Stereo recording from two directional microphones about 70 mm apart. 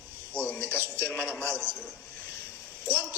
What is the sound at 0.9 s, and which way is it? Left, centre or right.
Speech, left.